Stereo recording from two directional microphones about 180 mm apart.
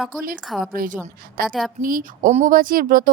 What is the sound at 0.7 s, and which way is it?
A woman's voice, 50° right (ahead or behind).